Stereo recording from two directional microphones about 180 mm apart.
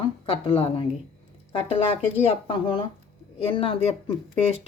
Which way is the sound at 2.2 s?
30° left (ahead or behind).